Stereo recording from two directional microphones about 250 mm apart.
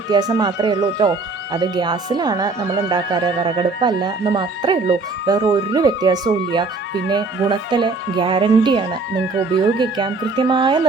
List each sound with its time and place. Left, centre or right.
0.1 s speech: centre